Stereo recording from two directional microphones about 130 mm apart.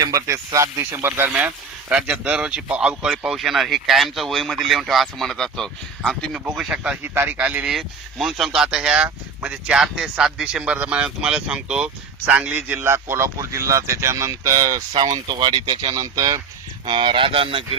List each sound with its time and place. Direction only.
0.0 s speech: 25° right (ahead or behind); by 6.4 s 5° left (ahead or behind)
6.4 s speech: 10° right (ahead or behind); by 16.4 s 30° right (ahead or behind)
16.8 s speech: 40° right (ahead or behind)